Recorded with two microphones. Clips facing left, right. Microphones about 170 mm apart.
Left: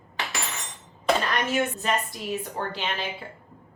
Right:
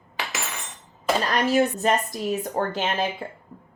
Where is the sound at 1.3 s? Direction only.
35° right (ahead or behind).